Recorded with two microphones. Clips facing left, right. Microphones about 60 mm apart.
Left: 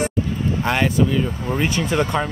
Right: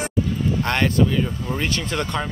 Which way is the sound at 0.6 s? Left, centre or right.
Centre.